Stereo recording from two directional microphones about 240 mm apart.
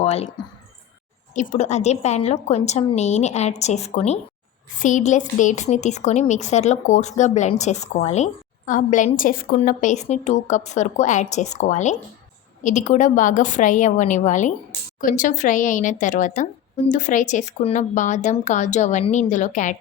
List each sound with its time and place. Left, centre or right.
0.0 s a woman's voice: left